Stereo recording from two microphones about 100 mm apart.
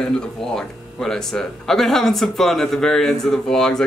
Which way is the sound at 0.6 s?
5° left (ahead or behind).